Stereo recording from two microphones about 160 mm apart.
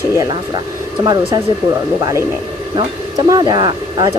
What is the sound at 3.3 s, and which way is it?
Speech, 25° right (ahead or behind).